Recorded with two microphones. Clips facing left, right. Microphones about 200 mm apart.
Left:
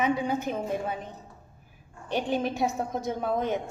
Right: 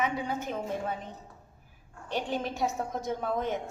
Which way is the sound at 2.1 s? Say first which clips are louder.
Left 4 dB; 15° left (ahead or behind).